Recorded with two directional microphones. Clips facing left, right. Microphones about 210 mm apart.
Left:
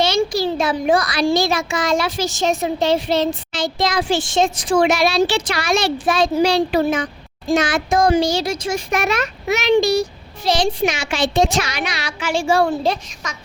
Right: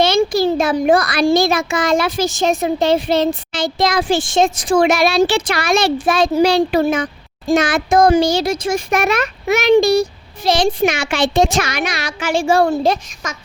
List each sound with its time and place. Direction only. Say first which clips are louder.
0.0 s a child's voice: right 4 dB; 55° right (ahead or behind)